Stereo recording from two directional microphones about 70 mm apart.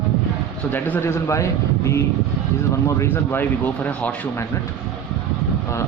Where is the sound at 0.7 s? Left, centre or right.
Left.